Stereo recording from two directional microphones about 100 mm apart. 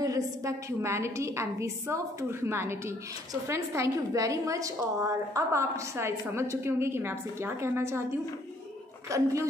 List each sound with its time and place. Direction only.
0.0 s a woman's voice: 35° right (ahead or behind)